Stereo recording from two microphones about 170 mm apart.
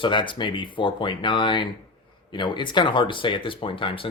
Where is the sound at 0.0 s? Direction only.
30° left (ahead or behind).